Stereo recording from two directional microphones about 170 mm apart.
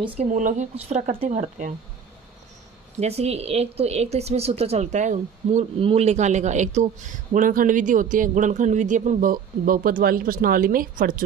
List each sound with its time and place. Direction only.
0.0 s speech: 40° right (ahead or behind)
3.0 s speech: 40° right (ahead or behind); by 11.2 s 55° right (ahead or behind)